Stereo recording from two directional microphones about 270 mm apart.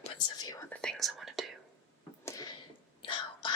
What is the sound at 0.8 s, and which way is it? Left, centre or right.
Whispering, centre.